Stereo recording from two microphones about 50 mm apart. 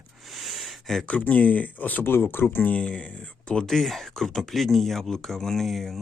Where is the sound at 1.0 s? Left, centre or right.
Left.